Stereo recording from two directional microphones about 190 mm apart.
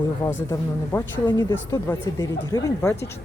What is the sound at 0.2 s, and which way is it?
Speech, 15° left (ahead or behind).